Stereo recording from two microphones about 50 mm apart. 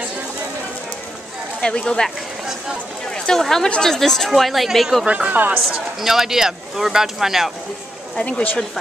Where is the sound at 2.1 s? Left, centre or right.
Centre.